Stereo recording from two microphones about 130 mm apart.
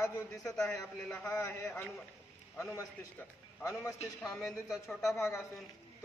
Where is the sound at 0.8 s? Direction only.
5° left (ahead or behind).